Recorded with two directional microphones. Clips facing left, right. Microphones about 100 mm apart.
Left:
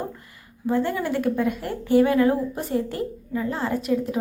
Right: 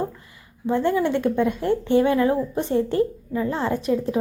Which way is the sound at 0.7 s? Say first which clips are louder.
Right 3 dB; 25° right (ahead or behind).